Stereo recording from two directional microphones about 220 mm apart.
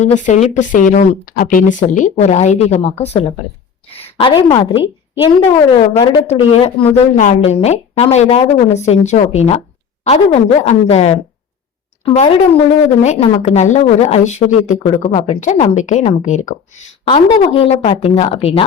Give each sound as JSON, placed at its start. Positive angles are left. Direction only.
{"t": 0.0, "sound": "speech", "side_deg": 35}
{"t": 3.8, "sound": "a sound", "side_deg": 25}
{"t": 4.7, "sound": "a woman's voice", "side_deg": -10}
{"t": 5.7, "sound": "a woman's voice", "side_deg": 20}